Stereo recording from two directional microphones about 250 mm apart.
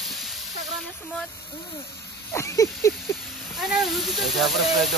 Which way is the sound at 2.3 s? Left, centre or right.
Centre.